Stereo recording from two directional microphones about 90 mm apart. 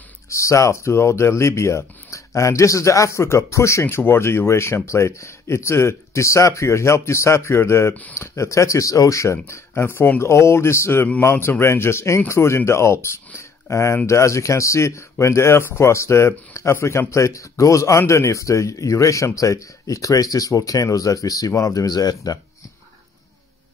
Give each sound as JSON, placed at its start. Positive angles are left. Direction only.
{"t": 0.3, "sound": "speech", "side_deg": 35}